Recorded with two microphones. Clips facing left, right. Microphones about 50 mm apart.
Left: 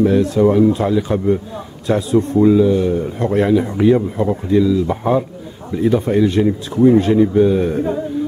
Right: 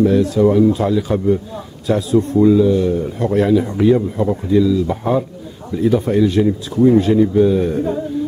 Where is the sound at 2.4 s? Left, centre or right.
Centre.